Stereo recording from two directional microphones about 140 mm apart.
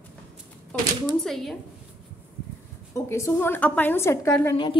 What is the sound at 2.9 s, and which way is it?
A woman's voice, 20° left (ahead or behind).